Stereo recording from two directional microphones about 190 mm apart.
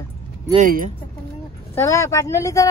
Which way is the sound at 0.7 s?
45° right (ahead or behind).